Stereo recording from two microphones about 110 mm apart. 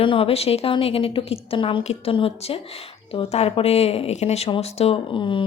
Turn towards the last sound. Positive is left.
turn(degrees=50)  # may be behind; listen again after turning